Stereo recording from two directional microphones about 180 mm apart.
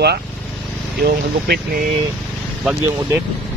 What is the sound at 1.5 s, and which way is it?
Speech, 65° right (ahead or behind).